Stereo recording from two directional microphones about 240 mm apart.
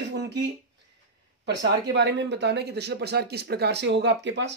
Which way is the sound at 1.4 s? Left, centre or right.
Right.